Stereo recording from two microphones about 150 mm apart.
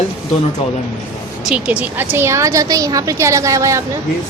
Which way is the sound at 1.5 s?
10° right (ahead or behind).